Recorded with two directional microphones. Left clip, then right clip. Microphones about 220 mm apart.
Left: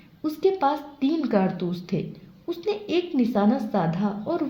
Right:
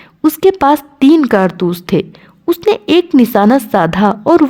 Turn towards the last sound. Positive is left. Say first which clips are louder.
# right 18 dB
turn(degrees=-50)  # may be behind; listen again after turning